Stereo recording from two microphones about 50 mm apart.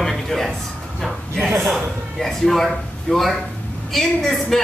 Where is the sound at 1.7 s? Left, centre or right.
Centre.